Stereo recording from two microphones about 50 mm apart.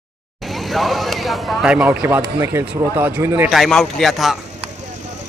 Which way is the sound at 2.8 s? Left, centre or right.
Right.